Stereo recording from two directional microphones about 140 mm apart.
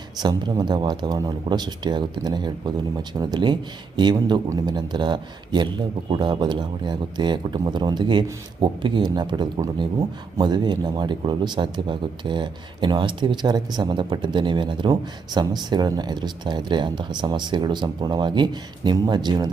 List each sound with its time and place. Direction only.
0.2 s speech: 30° right (ahead or behind)